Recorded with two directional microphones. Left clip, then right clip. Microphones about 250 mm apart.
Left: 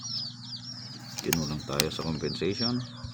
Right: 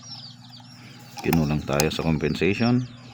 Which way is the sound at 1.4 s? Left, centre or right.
Right.